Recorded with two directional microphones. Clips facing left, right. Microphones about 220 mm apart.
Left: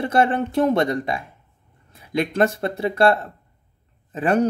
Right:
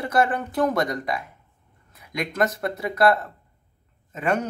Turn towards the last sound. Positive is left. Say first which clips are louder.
# left 5 dB
turn(degrees=30)  # may be behind; listen again after turning